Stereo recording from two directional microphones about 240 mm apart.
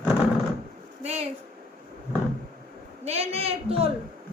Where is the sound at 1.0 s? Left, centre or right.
Right.